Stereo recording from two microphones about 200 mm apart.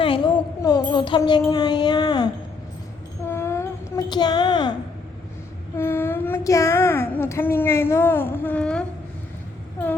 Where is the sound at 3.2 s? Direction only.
15° left (ahead or behind).